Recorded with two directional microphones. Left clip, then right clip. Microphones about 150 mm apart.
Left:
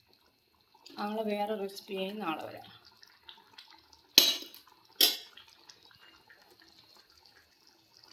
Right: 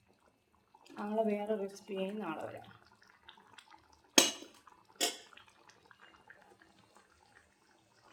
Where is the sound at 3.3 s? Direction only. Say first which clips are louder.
Left 4 dB; 15° right (ahead or behind).